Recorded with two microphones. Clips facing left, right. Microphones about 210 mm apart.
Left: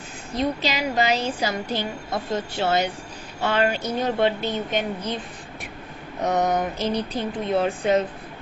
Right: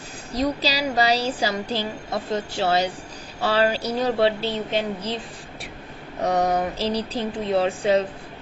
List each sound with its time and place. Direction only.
0.3 s speech: 35° right (ahead or behind)
6.2 s speech: 30° right (ahead or behind)